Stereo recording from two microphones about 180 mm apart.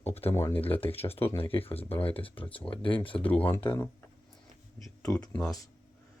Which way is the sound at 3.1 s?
10° left (ahead or behind).